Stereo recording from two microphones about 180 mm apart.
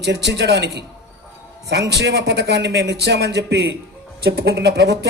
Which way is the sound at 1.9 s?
65° right (ahead or behind).